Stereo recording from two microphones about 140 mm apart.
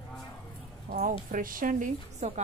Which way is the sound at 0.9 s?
70° right (ahead or behind).